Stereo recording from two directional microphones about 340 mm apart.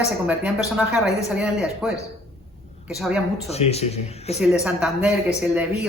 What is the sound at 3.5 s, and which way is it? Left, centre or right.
Speech, centre.